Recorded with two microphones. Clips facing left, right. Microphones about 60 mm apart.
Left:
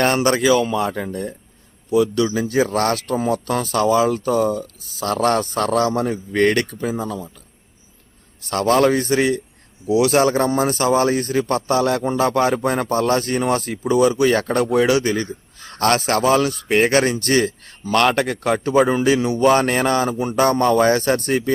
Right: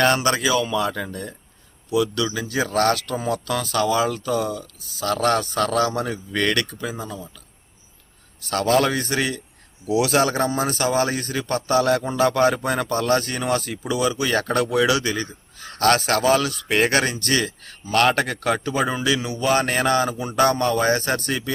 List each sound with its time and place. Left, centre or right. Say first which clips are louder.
0.0 s speech: left 2 dB; left
8.6 s speech: left 4 dB; left
11.0 s a man's voice: left 6 dB; right
11.4 s speech: right 3 dB; left
16.9 s a man's voice: left 4 dB; right
17.2 s speech: left 5 dB; left
21.0 s speech: left 5 dB; right
21.2 s speech: left 6 dB; left